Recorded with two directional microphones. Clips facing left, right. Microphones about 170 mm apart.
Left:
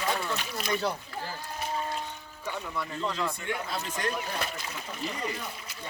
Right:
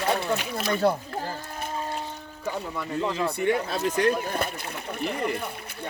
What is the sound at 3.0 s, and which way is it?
Speech, 65° right (ahead or behind).